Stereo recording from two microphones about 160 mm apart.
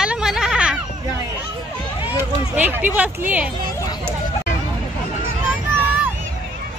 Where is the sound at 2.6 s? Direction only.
10° right (ahead or behind).